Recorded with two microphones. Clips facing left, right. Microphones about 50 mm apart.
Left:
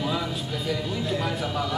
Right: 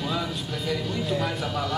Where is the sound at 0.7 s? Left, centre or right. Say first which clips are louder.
Right 1 dB; centre.